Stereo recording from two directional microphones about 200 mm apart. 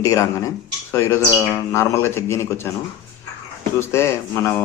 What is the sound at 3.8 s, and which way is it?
Speech, 15° left (ahead or behind).